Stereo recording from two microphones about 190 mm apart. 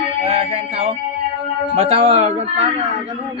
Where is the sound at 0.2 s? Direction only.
30° right (ahead or behind).